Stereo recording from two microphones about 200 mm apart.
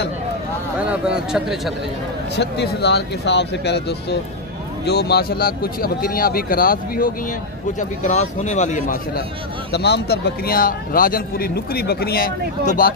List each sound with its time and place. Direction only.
0.7 s a man's voice: 5° right (ahead or behind)
2.3 s a man's voice: 55° left (ahead or behind); by 9.2 s 40° left (ahead or behind)
9.7 s a man's voice: 55° left (ahead or behind)